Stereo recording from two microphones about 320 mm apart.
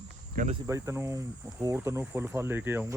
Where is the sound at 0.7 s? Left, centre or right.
Centre.